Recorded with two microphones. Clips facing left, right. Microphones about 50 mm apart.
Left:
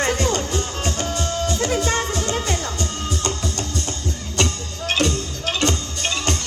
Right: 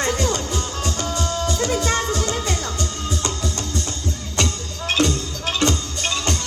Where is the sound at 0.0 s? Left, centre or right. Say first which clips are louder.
Left 1 dB; left.